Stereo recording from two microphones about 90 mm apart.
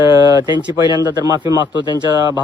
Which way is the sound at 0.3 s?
45° right (ahead or behind).